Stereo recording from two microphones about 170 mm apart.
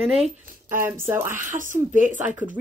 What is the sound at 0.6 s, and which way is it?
Speech, 15° right (ahead or behind).